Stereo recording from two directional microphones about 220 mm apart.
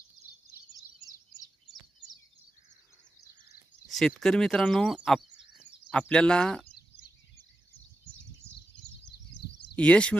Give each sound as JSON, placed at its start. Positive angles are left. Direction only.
{"t": 1.0, "sound": "bird vocalization", "side_deg": -15}
{"t": 3.8, "sound": "speech", "side_deg": 0}
{"t": 8.7, "sound": "a sound", "side_deg": 55}
{"t": 9.4, "sound": "bird", "side_deg": 90}
{"t": 9.7, "sound": "speech", "side_deg": 5}